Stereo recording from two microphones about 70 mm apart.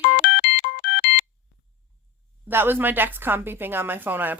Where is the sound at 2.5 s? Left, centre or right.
Right.